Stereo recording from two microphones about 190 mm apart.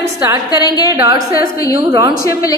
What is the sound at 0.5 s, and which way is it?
Speech, 20° left (ahead or behind).